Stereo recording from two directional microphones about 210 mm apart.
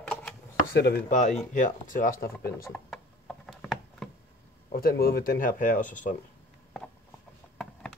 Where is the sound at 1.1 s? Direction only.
35° left (ahead or behind).